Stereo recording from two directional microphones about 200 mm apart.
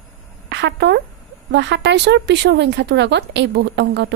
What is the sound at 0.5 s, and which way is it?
Speech, 60° right (ahead or behind).